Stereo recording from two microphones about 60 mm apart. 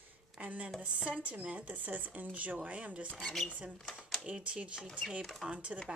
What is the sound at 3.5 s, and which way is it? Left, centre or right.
Speech, right.